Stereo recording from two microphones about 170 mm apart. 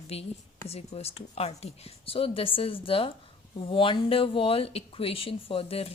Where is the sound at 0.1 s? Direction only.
35° left (ahead or behind).